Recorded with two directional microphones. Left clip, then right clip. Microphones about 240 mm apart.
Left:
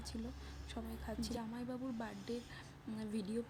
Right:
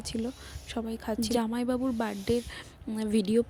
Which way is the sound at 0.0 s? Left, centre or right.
Right.